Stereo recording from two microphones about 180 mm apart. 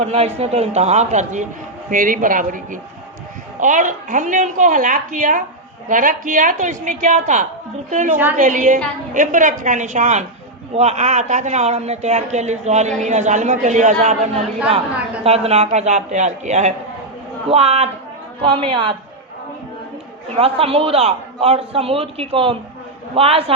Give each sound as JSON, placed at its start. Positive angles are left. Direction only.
{"t": 0.1, "sound": "a woman's voice", "side_deg": -35}
{"t": 20.3, "sound": "speech", "side_deg": -35}